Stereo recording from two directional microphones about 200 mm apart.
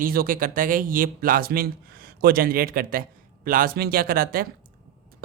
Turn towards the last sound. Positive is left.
turn(degrees=-45)  # may be behind; listen again after turning